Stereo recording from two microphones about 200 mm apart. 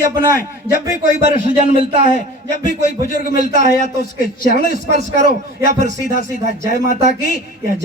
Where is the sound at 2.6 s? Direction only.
45° left (ahead or behind).